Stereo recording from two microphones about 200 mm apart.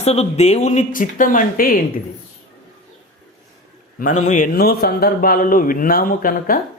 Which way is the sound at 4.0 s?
40° left (ahead or behind).